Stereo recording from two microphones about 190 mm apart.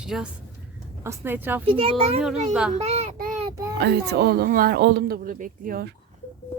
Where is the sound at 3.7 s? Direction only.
60° right (ahead or behind).